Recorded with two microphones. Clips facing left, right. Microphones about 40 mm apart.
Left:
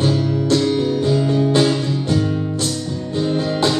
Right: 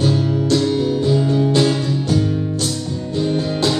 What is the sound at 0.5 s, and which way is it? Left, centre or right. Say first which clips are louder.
Music: even; centre.